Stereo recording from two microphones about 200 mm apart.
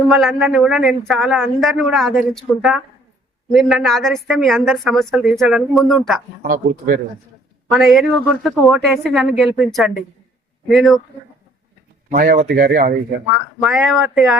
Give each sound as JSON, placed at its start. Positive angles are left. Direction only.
{"t": 0.1, "sound": "speech", "side_deg": 0}
{"t": 6.5, "sound": "speech", "side_deg": -45}
{"t": 7.7, "sound": "speech", "side_deg": 0}
{"t": 12.1, "sound": "speech", "side_deg": -45}
{"t": 13.6, "sound": "speech", "side_deg": 0}